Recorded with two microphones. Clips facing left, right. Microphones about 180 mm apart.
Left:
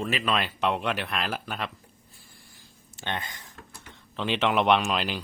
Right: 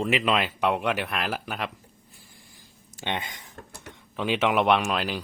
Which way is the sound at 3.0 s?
15° right (ahead or behind).